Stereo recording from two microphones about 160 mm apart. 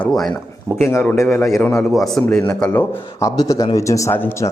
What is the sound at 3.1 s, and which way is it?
Speech, 20° left (ahead or behind).